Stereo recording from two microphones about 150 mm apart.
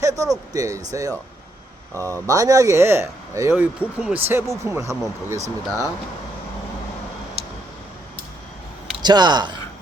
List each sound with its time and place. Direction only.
0.0 s speech: 20° right (ahead or behind)
7.4 s tick-tock: 40° right (ahead or behind)
9.0 s speech: 30° right (ahead or behind)